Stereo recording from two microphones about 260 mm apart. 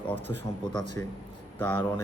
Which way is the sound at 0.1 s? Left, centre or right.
Centre.